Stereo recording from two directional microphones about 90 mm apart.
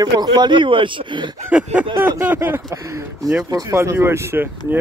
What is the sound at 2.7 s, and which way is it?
Speech, 40° right (ahead or behind).